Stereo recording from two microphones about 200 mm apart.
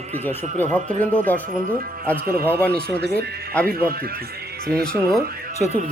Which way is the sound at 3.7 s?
50° right (ahead or behind).